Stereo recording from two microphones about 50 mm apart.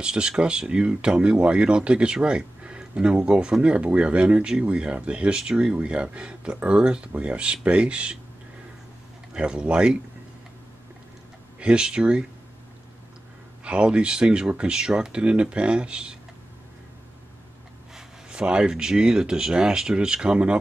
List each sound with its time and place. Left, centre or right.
0.0 s speech: centre
9.3 s speech: centre
11.6 s speech: centre
13.7 s speech: right
17.9 s speech: centre